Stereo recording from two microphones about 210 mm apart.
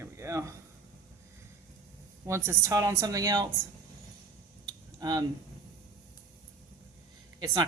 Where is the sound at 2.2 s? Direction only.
15° right (ahead or behind).